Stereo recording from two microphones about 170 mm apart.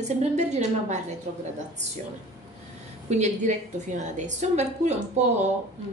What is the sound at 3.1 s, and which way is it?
A woman's voice, 45° right (ahead or behind).